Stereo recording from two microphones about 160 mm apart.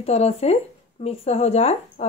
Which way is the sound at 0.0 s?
40° left (ahead or behind).